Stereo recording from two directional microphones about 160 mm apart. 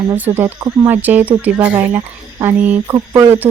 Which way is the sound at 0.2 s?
10° right (ahead or behind).